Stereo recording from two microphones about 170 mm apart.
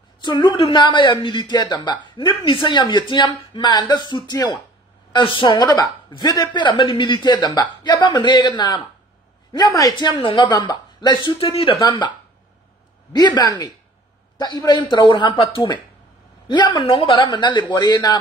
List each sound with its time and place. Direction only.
0.2 s a woman's voice: 25° left (ahead or behind)
13.1 s a woman's voice: 25° left (ahead or behind)